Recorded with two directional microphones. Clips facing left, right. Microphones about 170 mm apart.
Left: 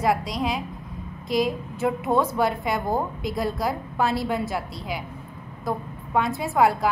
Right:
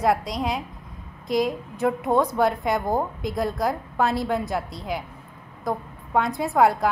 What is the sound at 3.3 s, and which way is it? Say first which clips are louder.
A woman's voice: right 2 dB; centre (ahead or behind).